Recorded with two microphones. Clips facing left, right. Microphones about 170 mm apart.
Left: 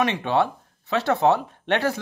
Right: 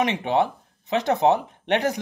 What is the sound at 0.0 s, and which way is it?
Speech, 20° right (ahead or behind).